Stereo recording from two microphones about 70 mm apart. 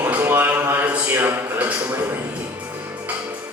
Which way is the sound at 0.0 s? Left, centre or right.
Right.